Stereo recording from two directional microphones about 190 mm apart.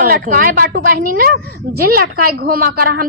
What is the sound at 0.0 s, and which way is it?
A woman's voice, 50° right (ahead or behind).